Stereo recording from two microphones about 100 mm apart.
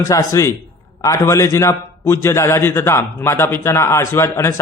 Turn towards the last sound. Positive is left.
turn(degrees=25)  # may be behind; listen again after turning